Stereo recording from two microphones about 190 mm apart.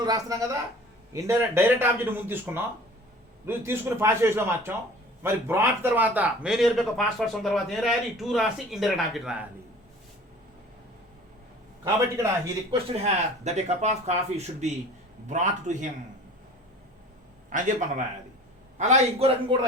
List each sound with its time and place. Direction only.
0.0 s speech: 20° right (ahead or behind)
11.9 s speech: 15° right (ahead or behind)
12.7 s speech: 35° right (ahead or behind)
17.5 s speech: 40° right (ahead or behind)